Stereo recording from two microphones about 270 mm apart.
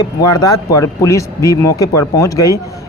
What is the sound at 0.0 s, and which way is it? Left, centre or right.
Speech, centre.